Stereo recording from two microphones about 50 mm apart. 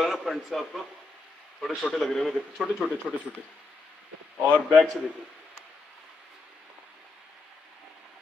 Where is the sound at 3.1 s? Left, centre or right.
Centre.